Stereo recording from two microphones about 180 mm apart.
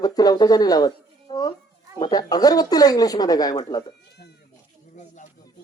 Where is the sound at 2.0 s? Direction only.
20° left (ahead or behind).